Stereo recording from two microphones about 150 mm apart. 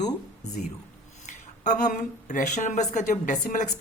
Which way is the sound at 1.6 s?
55° left (ahead or behind).